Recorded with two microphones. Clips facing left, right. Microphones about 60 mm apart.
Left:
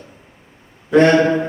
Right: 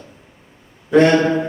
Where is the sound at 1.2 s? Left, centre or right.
Centre.